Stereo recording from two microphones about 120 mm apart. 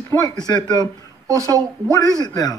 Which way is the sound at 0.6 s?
25° right (ahead or behind).